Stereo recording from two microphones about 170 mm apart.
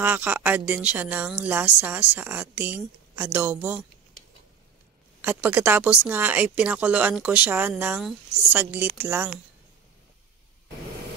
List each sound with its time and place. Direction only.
0.0 s speech: 10° right (ahead or behind)
5.2 s speech: 10° right (ahead or behind)